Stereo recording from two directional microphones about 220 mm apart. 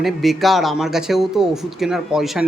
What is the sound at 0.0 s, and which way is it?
Speech, centre (ahead or behind).